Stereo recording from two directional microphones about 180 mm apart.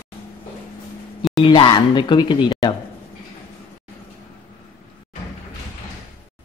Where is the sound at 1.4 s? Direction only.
25° left (ahead or behind).